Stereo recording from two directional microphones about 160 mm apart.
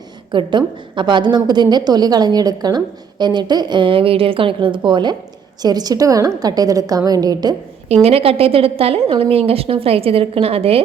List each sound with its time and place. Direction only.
0.3 s a woman's voice: 30° right (ahead or behind)
8.0 s speech: 35° right (ahead or behind)